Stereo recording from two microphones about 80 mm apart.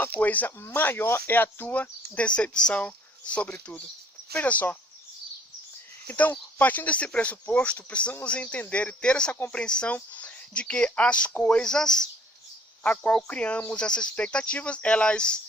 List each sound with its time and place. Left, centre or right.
0.0 s speech: centre
2.8 s cricket: centre
4.4 s speech: centre
6.1 s speech: centre